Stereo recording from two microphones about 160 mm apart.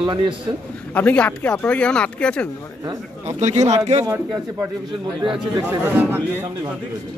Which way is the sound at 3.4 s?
45° right (ahead or behind).